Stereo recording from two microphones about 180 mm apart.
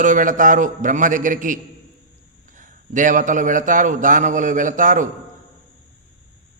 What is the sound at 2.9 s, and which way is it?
Speech, 45° right (ahead or behind).